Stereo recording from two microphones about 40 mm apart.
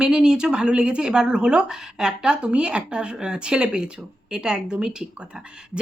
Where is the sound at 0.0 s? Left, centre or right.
Centre.